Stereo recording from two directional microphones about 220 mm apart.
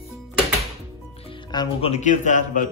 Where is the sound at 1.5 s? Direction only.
20° left (ahead or behind).